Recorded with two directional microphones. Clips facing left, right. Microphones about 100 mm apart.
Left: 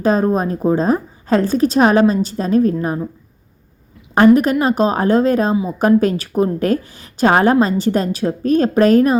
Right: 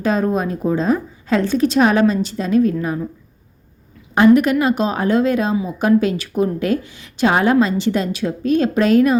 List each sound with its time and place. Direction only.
0.0 s a woman's voice: 35° left (ahead or behind)
4.1 s a woman's voice: 40° left (ahead or behind)